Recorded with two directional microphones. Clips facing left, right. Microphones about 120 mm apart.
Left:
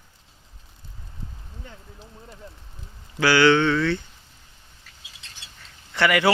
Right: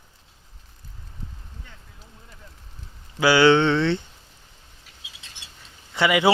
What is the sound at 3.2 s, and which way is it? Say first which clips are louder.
Speech: right 1 dB; 20° right (ahead or behind).